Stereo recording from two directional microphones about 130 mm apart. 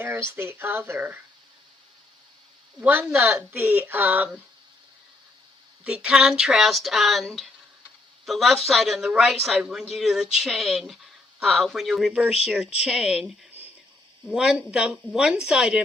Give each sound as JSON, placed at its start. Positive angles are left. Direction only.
{"t": 0.0, "sound": "a woman's voice", "side_deg": -20}
{"t": 2.8, "sound": "a woman's voice", "side_deg": -15}
{"t": 5.8, "sound": "a woman's voice", "side_deg": -5}